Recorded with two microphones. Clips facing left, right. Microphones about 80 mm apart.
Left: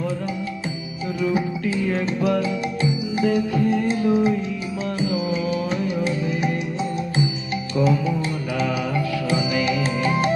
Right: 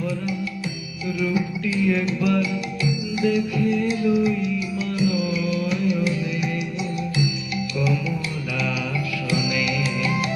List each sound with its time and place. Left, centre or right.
1.2 s music: left
9.3 s music: left